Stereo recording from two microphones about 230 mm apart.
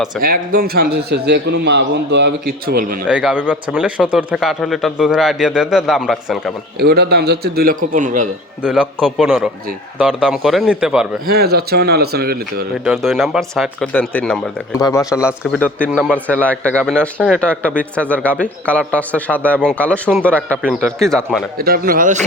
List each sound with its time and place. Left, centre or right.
0.2 s a man's voice: right
3.1 s speech: centre
6.7 s a man's voice: right
8.6 s speech: centre
11.3 s a man's voice: right
12.8 s speech: centre
15.1 s speech: centre
15.5 s a man's voice: centre
21.6 s speech: right